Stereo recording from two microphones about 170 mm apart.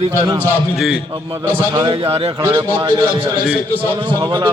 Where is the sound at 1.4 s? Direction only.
25° right (ahead or behind).